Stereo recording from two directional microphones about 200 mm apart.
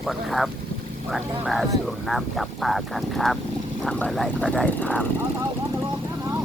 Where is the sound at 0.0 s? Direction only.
Centre (ahead or behind).